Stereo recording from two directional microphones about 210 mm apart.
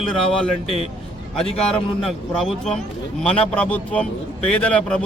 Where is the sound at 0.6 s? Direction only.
30° left (ahead or behind).